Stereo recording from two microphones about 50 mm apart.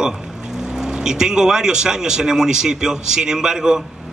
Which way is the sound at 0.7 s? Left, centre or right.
Centre.